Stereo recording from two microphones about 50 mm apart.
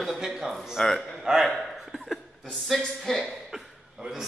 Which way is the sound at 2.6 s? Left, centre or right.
Centre.